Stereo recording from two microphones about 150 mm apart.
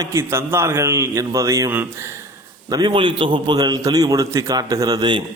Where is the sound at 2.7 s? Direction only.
30° right (ahead or behind).